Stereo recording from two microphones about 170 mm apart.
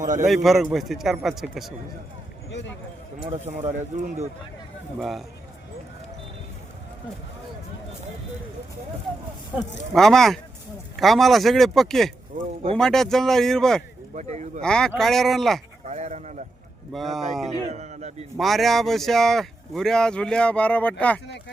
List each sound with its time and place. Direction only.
0.0 s a man's voice: 45° right (ahead or behind)
0.3 s speech: centre (ahead or behind)
2.5 s speech: 90° left
3.2 s a man's voice: 40° right (ahead or behind)
4.9 s speech: centre (ahead or behind)
9.9 s speech: centre (ahead or behind)
14.2 s speech: 45° right (ahead or behind)
14.6 s speech: 5° left (ahead or behind)
15.8 s a sound: 40° right (ahead or behind)
16.9 s speech: centre (ahead or behind)
17.5 s a man's voice: 40° right (ahead or behind)
18.3 s speech: centre (ahead or behind)